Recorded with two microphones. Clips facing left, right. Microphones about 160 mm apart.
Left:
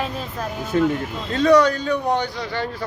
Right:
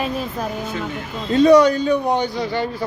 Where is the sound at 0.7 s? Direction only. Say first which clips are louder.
Left 14 dB; 50° left (ahead or behind).